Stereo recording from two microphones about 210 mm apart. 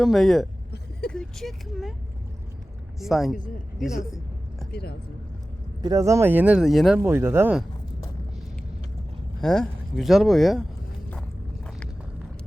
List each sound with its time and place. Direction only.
0.0 s speech: centre (ahead or behind)
3.0 s speech: centre (ahead or behind)
4.7 s speech: 50° left (ahead or behind)
5.8 s speech: 15° right (ahead or behind); by 7.0 s centre (ahead or behind)
7.0 s speech: 10° right (ahead or behind)
9.4 s speech: centre (ahead or behind)
11.1 s walk: 5° left (ahead or behind)